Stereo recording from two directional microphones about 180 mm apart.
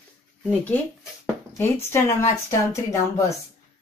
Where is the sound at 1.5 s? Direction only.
15° left (ahead or behind).